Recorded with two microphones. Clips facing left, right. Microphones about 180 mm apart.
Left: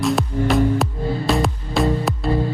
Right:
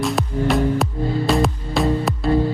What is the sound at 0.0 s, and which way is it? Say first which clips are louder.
Music: left 1 dB; centre (ahead or behind).